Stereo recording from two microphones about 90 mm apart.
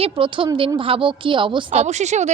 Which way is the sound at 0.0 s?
70° right (ahead or behind).